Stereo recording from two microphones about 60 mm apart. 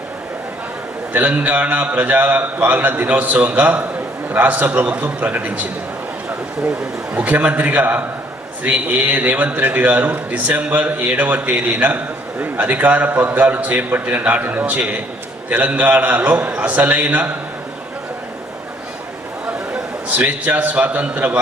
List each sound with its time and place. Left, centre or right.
1.1 s a man's voice: right
6.7 s a man's voice: right
19.7 s a man's voice: right